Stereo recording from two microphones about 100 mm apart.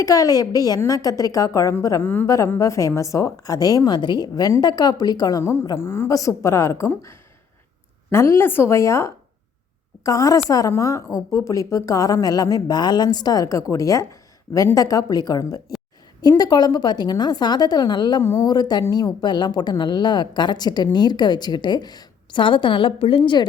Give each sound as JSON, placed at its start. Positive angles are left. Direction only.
{"t": 0.0, "sound": "a woman's voice", "side_deg": 35}
{"t": 5.6, "sound": "a woman's voice", "side_deg": 25}
{"t": 18.2, "sound": "a woman's voice", "side_deg": 25}
{"t": 18.4, "sound": "a woman's voice", "side_deg": 45}